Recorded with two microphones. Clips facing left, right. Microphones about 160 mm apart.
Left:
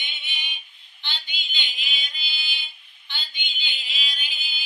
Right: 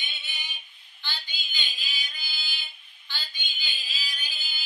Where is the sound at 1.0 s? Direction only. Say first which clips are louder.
Left 2 dB; 20° left (ahead or behind).